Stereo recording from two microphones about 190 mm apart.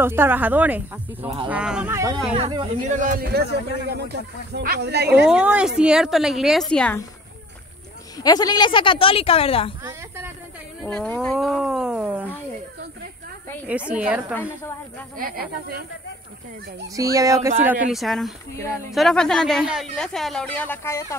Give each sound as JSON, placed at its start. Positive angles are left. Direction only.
{"t": 0.0, "sound": "speech", "side_deg": -10}
{"t": 2.3, "sound": "speech", "side_deg": -30}
{"t": 2.9, "sound": "speech", "side_deg": -45}
{"t": 5.2, "sound": "speech", "side_deg": -5}
{"t": 8.2, "sound": "speech", "side_deg": 20}
{"t": 9.8, "sound": "speech", "side_deg": -15}
{"t": 10.8, "sound": "speech", "side_deg": 5}
{"t": 13.7, "sound": "speech", "side_deg": -5}
{"t": 15.1, "sound": "speech", "side_deg": -50}
{"t": 16.8, "sound": "speech", "side_deg": -20}